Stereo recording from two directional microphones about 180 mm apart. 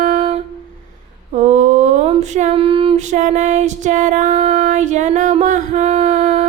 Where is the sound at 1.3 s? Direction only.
40° right (ahead or behind).